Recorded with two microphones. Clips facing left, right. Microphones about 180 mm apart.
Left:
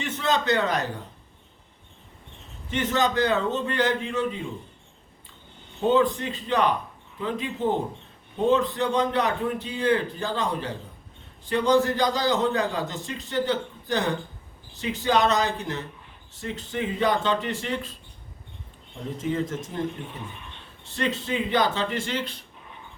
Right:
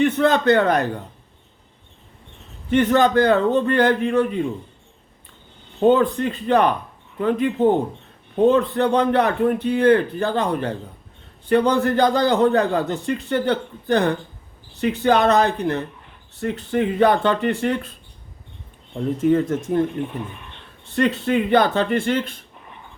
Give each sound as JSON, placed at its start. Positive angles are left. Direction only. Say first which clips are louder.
{"t": 0.0, "sound": "speech", "louder": "right 9 dB", "side_deg": -60}
{"t": 2.6, "sound": "a man's voice", "louder": "right 8 dB", "side_deg": -55}
{"t": 5.8, "sound": "a man's voice", "louder": "right 5 dB", "side_deg": -60}
{"t": 19.2, "sound": "a man's voice", "louder": "right 9 dB", "side_deg": -55}